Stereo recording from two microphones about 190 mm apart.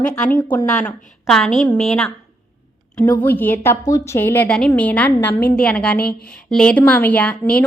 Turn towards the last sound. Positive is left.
turn(degrees=5)  # may be behind; listen again after turning